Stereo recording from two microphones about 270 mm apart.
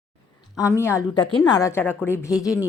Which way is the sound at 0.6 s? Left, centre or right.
Centre.